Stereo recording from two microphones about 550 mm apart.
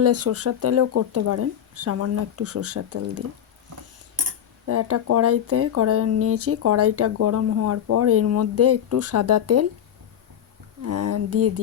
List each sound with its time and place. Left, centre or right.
0.0 s speech: right
4.6 s speech: right
10.8 s speech: right